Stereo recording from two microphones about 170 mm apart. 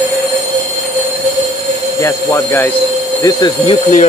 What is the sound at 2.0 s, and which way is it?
Speech, 15° left (ahead or behind).